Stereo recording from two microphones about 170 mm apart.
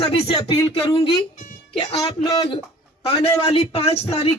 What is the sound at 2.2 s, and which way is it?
Speech, 20° left (ahead or behind).